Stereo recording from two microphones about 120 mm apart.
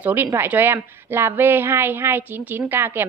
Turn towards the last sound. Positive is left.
turn(degrees=-20)  # may be behind; listen again after turning